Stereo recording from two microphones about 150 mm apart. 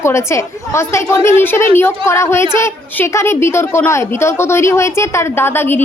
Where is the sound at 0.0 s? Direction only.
20° left (ahead or behind).